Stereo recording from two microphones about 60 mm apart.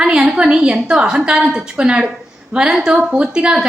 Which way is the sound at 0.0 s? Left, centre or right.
Centre.